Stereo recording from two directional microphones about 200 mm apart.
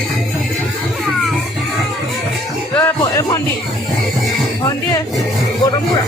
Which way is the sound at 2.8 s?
15° left (ahead or behind).